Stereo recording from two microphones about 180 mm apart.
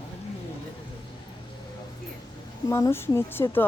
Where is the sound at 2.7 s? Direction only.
15° left (ahead or behind).